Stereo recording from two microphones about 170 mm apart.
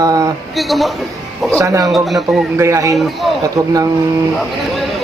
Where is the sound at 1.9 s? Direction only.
Centre (ahead or behind).